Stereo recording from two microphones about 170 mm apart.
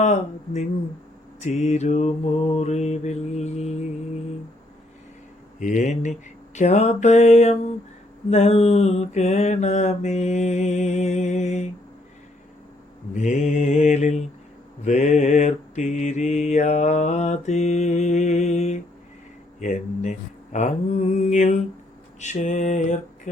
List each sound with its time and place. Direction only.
0.0 s mantra: 45° left (ahead or behind)
5.5 s mantra: 45° left (ahead or behind)
13.1 s mantra: 45° left (ahead or behind)